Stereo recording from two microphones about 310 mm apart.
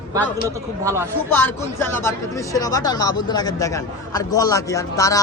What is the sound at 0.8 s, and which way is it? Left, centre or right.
Speech, centre.